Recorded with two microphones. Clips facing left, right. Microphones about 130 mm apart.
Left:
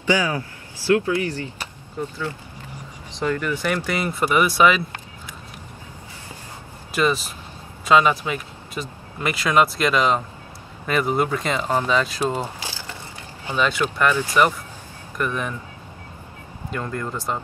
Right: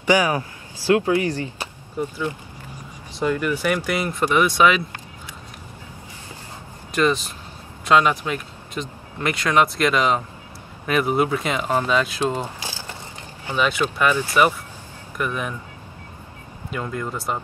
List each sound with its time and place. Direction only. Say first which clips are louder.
0.3 s a sound: right 3 dB; 15° right (ahead or behind)
1.1 s speech: right 3 dB; 15° right (ahead or behind); by 4.8 s centre (ahead or behind)
6.9 s speech: right 1 dB; 5° left (ahead or behind)
12.2 s speech: even; 10° left (ahead or behind)
13.6 s speech: even; centre (ahead or behind)
16.7 s speech: even; 5° right (ahead or behind)